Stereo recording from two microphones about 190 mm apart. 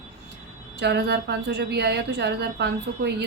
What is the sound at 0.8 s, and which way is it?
A woman's voice, 60° right (ahead or behind).